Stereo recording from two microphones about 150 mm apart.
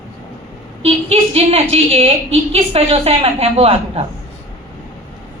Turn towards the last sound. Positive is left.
turn(degrees=-40)  # may be behind; listen again after turning